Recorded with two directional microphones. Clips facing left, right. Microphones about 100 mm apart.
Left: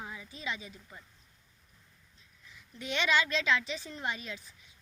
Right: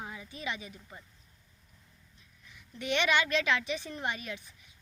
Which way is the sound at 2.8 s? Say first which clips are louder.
Right 1 dB; 60° right (ahead or behind).